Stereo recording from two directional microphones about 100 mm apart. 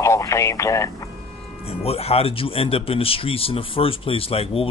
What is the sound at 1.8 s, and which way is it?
Speech, 90° left.